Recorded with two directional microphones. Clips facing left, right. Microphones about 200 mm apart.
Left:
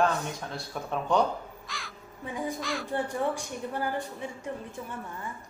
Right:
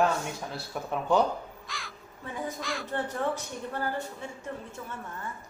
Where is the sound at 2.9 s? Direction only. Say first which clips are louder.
Left 1 dB; 15° left (ahead or behind).